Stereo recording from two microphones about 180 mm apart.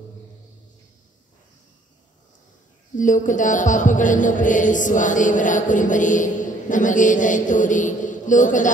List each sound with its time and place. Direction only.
3.0 s a man's voice: 45° left (ahead or behind)